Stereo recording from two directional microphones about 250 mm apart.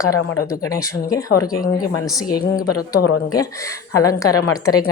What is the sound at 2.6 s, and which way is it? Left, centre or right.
Speech, left.